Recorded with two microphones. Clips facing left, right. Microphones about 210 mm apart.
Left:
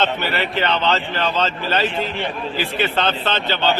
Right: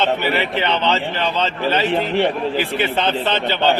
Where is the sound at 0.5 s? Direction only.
20° right (ahead or behind).